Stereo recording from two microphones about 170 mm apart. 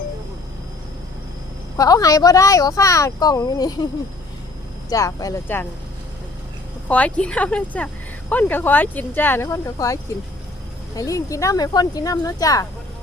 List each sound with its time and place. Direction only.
1.7 s speech: 20° left (ahead or behind)
4.9 s speech: 20° left (ahead or behind)
6.8 s speech: 10° left (ahead or behind)